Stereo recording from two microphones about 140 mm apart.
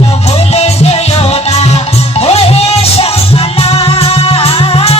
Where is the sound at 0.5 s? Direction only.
50° left (ahead or behind).